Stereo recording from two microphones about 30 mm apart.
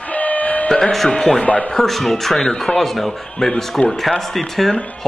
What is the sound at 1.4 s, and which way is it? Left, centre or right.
Speech, left.